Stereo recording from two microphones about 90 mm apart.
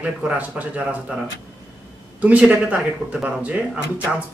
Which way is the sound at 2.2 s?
15° right (ahead or behind).